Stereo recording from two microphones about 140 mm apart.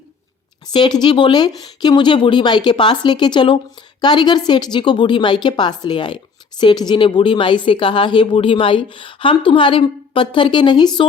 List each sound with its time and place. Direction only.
0.7 s a woman's voice: 30° left (ahead or behind)